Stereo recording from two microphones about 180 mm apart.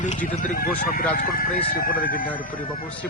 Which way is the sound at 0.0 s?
45° left (ahead or behind).